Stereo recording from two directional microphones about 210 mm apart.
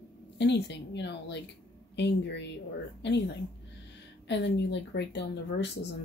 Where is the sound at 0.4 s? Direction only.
55° left (ahead or behind).